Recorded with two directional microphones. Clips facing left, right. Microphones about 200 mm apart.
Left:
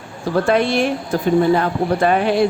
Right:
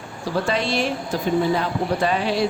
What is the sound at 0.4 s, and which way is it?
Speech, 55° left (ahead or behind).